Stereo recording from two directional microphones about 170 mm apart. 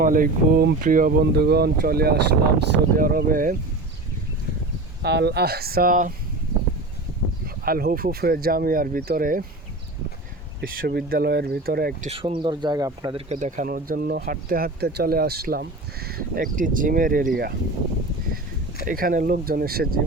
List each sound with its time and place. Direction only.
0.0 s speech: 55° right (ahead or behind)
1.2 s speech: 75° right (ahead or behind); by 3.6 s 55° right (ahead or behind)
5.0 s speech: 75° right (ahead or behind); by 6.1 s 55° right (ahead or behind)
7.4 s speech: 60° right (ahead or behind)
10.6 s speech: 65° right (ahead or behind)
12.0 s speech: 30° right (ahead or behind)
13.1 s speech: 40° right (ahead or behind); by 17.5 s 60° right (ahead or behind)
18.9 s speech: 55° right (ahead or behind)